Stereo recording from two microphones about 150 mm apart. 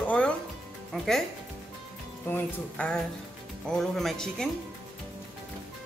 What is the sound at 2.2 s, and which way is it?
Speech, 10° left (ahead or behind).